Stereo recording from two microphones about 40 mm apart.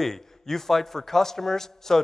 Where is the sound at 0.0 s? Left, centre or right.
Centre.